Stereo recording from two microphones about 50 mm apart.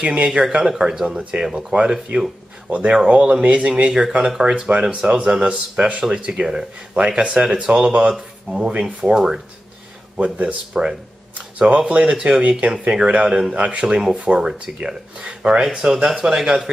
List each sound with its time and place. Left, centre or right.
0.0 s speech: right
10.1 s speech: right
15.6 s speech: centre